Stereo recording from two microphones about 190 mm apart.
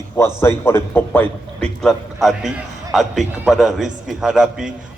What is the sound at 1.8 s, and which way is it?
A man's voice, centre (ahead or behind).